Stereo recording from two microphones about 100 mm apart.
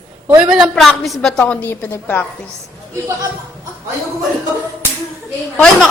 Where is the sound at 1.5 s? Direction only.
15° left (ahead or behind).